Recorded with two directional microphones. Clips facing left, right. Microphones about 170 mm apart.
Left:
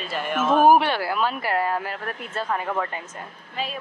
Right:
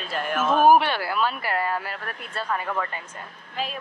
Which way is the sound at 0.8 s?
20° left (ahead or behind).